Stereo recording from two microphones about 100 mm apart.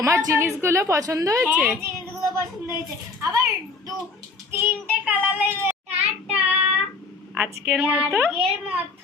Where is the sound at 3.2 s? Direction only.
35° right (ahead or behind).